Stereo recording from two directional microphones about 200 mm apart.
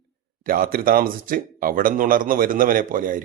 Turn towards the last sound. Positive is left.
turn(degrees=-40)  # may be behind; listen again after turning